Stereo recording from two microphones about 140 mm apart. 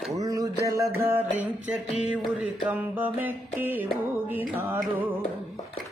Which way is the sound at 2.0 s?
5° right (ahead or behind).